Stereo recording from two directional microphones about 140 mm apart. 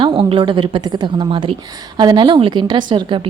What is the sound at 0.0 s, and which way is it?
A woman's voice, 35° right (ahead or behind).